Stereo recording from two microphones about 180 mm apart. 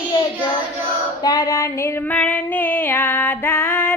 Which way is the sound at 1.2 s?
20° left (ahead or behind).